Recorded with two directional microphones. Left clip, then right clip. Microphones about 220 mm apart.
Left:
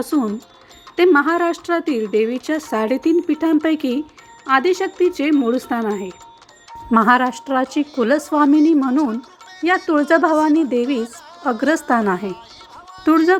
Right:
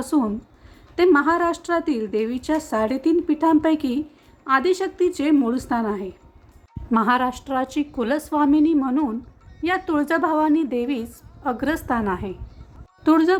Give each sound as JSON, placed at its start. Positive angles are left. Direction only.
{"t": 0.0, "sound": "speech", "side_deg": 5}
{"t": 13.1, "sound": "speech", "side_deg": 5}